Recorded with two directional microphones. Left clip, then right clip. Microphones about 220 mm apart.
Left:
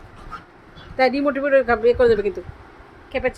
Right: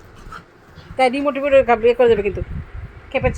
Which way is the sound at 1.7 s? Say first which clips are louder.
Right 2 dB; 15° right (ahead or behind).